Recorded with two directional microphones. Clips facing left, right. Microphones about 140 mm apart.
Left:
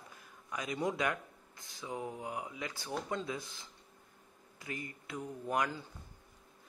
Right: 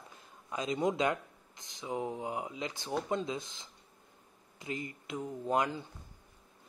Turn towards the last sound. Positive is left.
turn(degrees=-20)  # may be behind; listen again after turning